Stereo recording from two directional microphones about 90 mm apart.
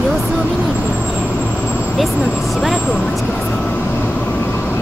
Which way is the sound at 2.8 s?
10° left (ahead or behind).